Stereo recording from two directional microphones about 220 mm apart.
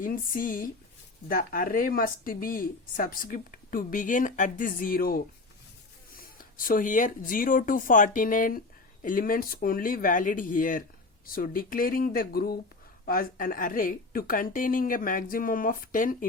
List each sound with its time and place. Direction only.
0.0 s speech: 40° left (ahead or behind)